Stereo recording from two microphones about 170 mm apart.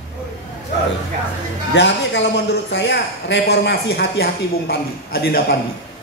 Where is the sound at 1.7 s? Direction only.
90° left; by 5.6 s 65° left (ahead or behind).